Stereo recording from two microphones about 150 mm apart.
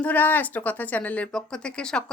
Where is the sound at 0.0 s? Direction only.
10° left (ahead or behind).